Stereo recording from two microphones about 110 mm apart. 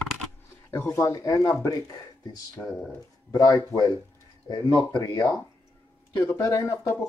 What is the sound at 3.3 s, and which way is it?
Speech, 35° left (ahead or behind).